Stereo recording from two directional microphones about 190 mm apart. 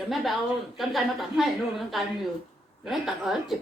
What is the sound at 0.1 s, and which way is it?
A woman's voice, centre (ahead or behind).